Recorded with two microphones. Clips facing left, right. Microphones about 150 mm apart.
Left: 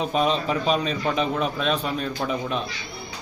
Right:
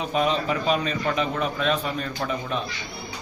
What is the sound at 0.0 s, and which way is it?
A man's voice, 25° left (ahead or behind).